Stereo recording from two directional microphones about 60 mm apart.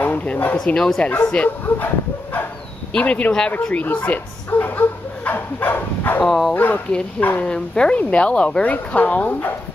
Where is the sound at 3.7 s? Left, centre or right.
Left.